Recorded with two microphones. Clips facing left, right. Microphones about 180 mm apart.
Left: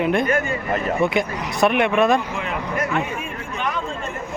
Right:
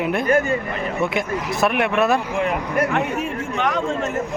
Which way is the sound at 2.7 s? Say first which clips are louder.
Right 2 dB; 70° right (ahead or behind).